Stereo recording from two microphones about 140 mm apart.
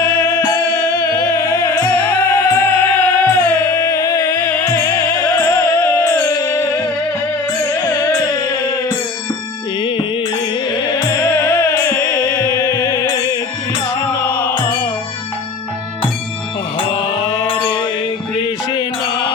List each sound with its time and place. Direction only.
0.0 s music: 15° left (ahead or behind)
10.8 s music: 30° left (ahead or behind)
17.4 s mantra: 35° left (ahead or behind)